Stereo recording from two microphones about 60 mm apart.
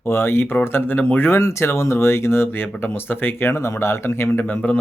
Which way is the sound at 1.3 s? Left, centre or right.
Left.